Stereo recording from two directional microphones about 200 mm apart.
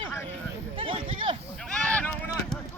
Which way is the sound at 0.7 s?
25° right (ahead or behind).